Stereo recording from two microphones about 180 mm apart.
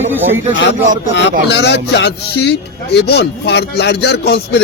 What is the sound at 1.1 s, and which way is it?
A man's voice, 80° left.